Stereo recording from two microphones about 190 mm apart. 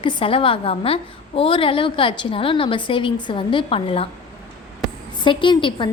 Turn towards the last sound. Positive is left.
turn(degrees=25)  # may be behind; listen again after turning